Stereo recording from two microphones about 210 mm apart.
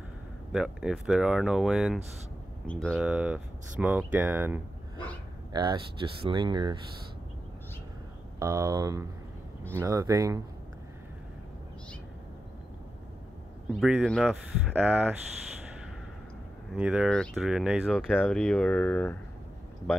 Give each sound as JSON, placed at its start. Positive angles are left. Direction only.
{"t": 0.5, "sound": "speech", "side_deg": -5}
{"t": 5.5, "sound": "speech", "side_deg": -20}
{"t": 8.4, "sound": "speech", "side_deg": -15}
{"t": 13.7, "sound": "speech", "side_deg": 0}
{"t": 16.7, "sound": "speech", "side_deg": -5}